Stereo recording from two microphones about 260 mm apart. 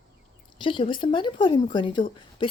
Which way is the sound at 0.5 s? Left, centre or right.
Centre.